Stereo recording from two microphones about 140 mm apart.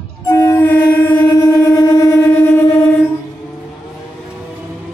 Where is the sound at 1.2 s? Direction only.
30° left (ahead or behind).